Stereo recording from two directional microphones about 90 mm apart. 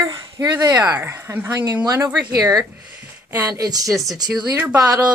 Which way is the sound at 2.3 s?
40° right (ahead or behind).